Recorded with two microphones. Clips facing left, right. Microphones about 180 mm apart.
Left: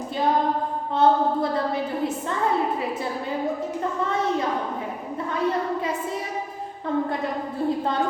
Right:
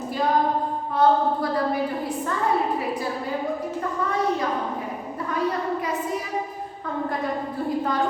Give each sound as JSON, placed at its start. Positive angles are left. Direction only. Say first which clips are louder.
{"t": 0.9, "sound": "a woman's voice", "louder": "even", "side_deg": 25}